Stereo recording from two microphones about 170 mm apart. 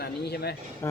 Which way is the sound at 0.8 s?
15° left (ahead or behind).